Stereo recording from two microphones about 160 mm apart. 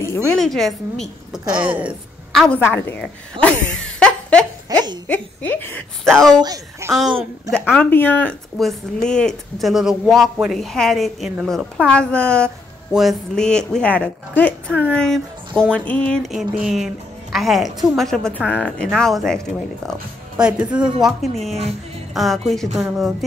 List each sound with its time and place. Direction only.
0.4 s speech: centre (ahead or behind)
2.4 s a woman's voice: 10° left (ahead or behind)
4.7 s a sound: 25° right (ahead or behind)
5.0 s a woman's voice: 10° left (ahead or behind)
6.4 s a child's voice: 20° right (ahead or behind)
7.5 s speech: 5° left (ahead or behind)